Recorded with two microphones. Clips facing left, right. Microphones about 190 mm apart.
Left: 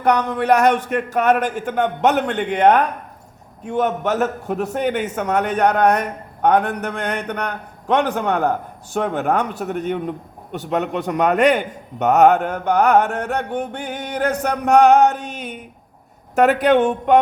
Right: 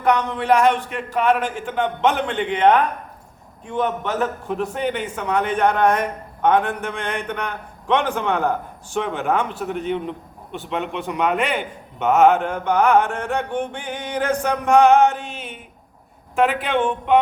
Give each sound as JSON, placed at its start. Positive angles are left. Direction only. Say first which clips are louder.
{"t": 0.1, "sound": "a man's voice", "louder": "left 2 dB", "side_deg": 45}